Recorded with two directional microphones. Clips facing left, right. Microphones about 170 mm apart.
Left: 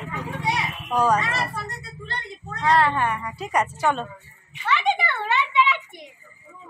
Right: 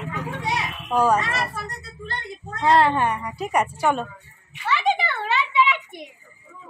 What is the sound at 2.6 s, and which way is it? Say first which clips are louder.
Speech: right 2 dB; 25° right (ahead or behind).